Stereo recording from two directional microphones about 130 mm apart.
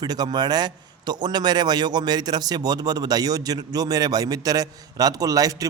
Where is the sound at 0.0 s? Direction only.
30° right (ahead or behind).